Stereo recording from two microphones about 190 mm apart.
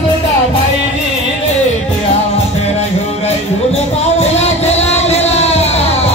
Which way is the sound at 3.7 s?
35° left (ahead or behind).